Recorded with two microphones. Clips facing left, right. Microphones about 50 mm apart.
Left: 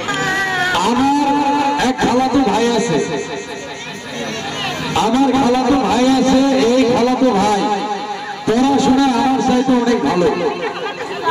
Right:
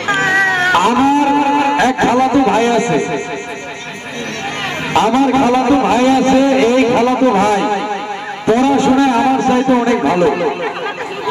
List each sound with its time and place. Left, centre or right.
0.0 s cat: right
4.9 s a man's voice: right